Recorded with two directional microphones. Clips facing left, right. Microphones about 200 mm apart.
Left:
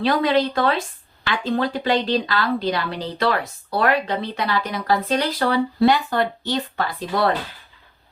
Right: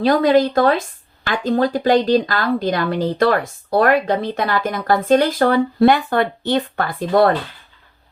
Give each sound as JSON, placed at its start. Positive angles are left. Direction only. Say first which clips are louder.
{"t": 0.0, "sound": "a woman's voice", "louder": "right 5 dB", "side_deg": -45}